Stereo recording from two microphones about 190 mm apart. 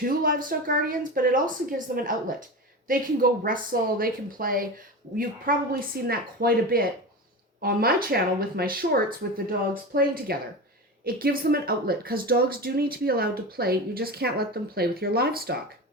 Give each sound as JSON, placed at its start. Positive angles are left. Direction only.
{"t": 0.0, "sound": "speech", "side_deg": -50}